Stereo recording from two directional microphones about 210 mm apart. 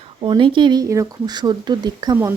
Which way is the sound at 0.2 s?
25° right (ahead or behind).